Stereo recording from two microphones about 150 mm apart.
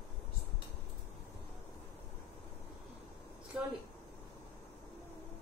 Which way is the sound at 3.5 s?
5° right (ahead or behind).